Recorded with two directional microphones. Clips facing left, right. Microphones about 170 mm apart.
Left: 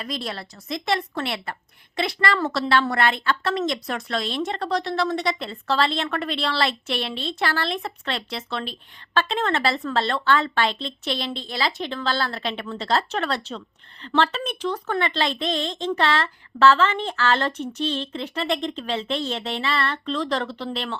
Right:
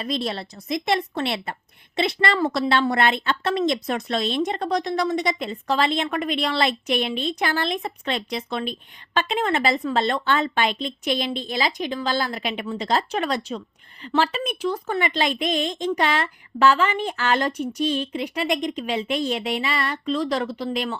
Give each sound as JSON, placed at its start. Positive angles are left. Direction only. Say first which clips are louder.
{"t": 0.0, "sound": "a woman's voice", "louder": "right 4 dB", "side_deg": -25}